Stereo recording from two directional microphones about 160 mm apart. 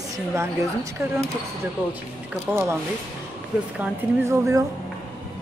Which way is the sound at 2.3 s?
15° right (ahead or behind).